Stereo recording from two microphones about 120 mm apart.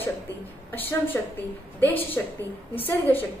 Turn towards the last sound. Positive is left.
turn(degrees=15)  # may be behind; listen again after turning